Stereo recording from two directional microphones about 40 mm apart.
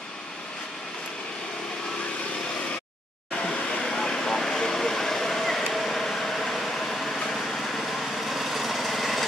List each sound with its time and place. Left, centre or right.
3.3 s vehicle: left
3.8 s vehicle: centre
7.3 s lawn mower: centre